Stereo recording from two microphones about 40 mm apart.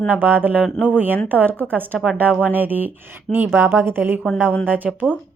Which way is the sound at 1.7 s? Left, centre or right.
Right.